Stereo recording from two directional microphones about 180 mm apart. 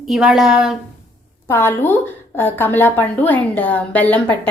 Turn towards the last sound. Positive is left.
turn(degrees=10)  # may be behind; listen again after turning